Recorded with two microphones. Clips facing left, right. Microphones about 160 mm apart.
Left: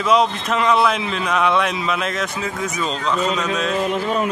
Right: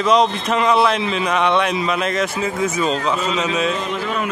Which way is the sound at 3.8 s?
45° left (ahead or behind).